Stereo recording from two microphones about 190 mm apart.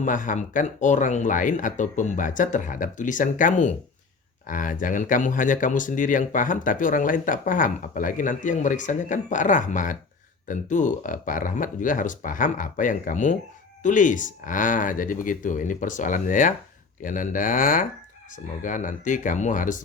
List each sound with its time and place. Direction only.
0.0 s speech: 45° left (ahead or behind)